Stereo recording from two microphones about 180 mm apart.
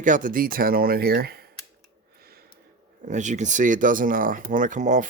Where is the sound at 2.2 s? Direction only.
55° right (ahead or behind).